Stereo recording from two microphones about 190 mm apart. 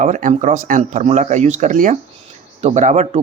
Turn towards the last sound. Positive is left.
turn(degrees=-40)  # may be behind; listen again after turning